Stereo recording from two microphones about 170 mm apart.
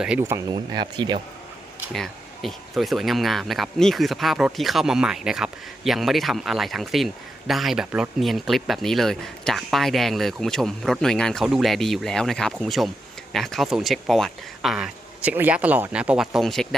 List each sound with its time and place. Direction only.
0.0 s speech: 10° right (ahead or behind); by 1.2 s 25° right (ahead or behind)
1.9 s speech: centre (ahead or behind)